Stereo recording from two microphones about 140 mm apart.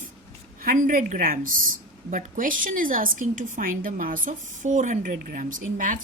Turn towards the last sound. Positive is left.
turn(degrees=-70)  # may be behind; listen again after turning